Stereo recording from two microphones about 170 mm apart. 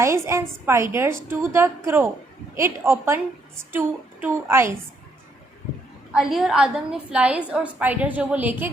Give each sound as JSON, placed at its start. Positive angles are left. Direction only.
{"t": 0.0, "sound": "a woman's voice", "side_deg": -15}
{"t": 6.1, "sound": "a woman's voice", "side_deg": 0}